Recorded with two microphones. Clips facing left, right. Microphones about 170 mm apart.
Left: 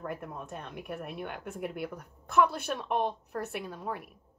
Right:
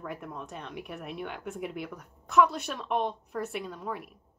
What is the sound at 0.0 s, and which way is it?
A woman's voice, centre (ahead or behind).